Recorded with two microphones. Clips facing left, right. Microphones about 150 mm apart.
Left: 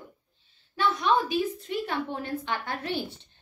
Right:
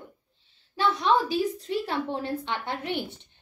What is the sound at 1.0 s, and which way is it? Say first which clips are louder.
A woman's voice: right 1 dB; 35° right (ahead or behind).